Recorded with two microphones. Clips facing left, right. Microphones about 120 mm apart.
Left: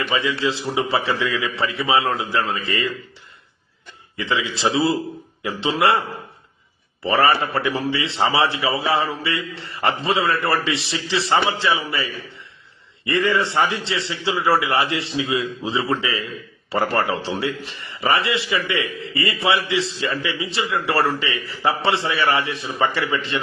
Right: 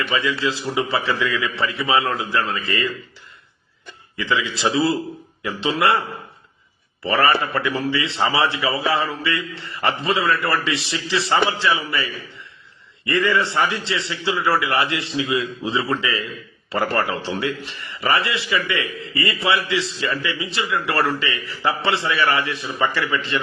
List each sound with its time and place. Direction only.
0.0 s a man's voice: 25° left (ahead or behind)
4.2 s a man's voice: 25° left (ahead or behind)
7.0 s a man's voice: 30° left (ahead or behind)